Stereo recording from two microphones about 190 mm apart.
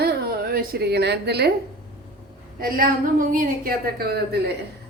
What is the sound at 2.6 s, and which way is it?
A woman's voice, 50° right (ahead or behind).